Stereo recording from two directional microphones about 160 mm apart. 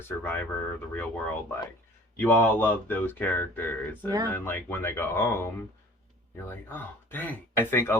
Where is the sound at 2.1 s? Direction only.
10° left (ahead or behind).